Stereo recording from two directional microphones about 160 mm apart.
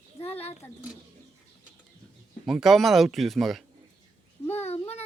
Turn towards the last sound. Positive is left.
turn(degrees=40)  # may be behind; listen again after turning